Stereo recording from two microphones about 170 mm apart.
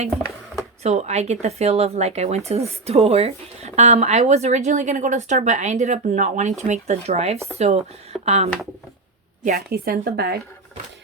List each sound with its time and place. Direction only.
0.8 s speech: 40° right (ahead or behind)
9.4 s a woman's voice: 65° right (ahead or behind)